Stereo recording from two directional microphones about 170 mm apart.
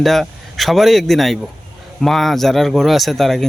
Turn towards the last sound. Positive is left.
turn(degrees=0)  # may be behind; listen again after turning